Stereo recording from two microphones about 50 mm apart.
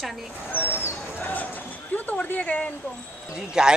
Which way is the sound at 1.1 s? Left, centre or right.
Left.